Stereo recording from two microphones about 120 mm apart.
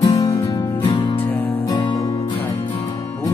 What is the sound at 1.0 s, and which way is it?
Music, 45° left (ahead or behind).